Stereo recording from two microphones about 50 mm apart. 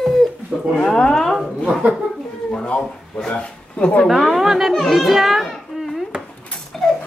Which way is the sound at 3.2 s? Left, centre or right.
Left.